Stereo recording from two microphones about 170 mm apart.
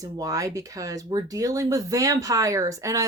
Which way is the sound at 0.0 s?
20° right (ahead or behind).